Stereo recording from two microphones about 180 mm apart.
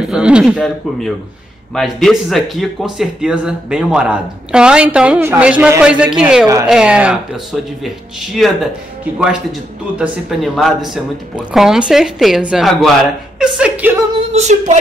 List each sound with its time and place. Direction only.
0.0 s speech: 5° right (ahead or behind)
9.0 s speech: 5° right (ahead or behind)
14.3 s a sound: 40° right (ahead or behind)